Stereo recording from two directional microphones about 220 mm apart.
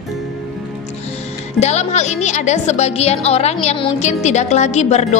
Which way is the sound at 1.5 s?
30° left (ahead or behind).